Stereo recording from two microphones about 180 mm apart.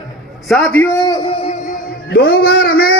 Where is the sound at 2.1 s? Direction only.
55° left (ahead or behind).